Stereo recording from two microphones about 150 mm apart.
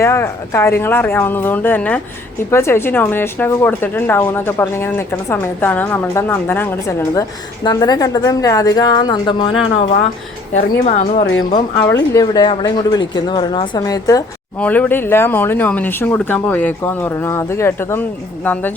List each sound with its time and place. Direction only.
0.0 s speech: 20° left (ahead or behind)
10.5 s a woman's voice: 50° left (ahead or behind)
11.8 s speech: 20° left (ahead or behind)
14.6 s speech: 10° left (ahead or behind)